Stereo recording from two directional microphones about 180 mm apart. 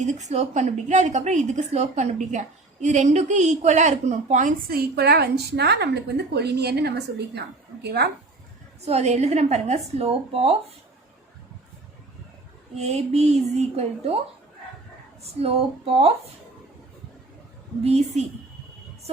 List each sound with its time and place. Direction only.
0.0 s a woman's voice: 40° right (ahead or behind); by 8.0 s 65° right (ahead or behind)
8.8 s a woman's voice: 35° right (ahead or behind)
12.7 s a woman's voice: 35° right (ahead or behind)
15.4 s a woman's voice: 35° right (ahead or behind)